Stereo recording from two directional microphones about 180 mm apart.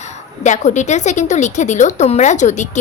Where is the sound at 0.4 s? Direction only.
40° left (ahead or behind).